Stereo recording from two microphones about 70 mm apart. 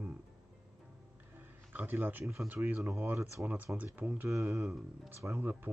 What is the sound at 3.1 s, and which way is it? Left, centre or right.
Speech, right.